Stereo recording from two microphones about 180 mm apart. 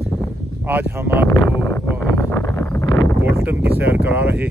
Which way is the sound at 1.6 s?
15° left (ahead or behind).